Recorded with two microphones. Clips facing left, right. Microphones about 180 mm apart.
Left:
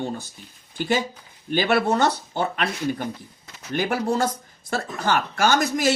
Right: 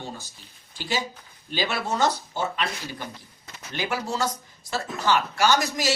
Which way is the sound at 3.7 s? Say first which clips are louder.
Left 6 dB; 55° left (ahead or behind).